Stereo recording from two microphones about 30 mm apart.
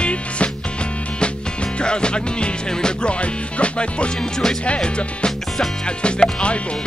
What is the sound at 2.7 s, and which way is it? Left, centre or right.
Speech, left.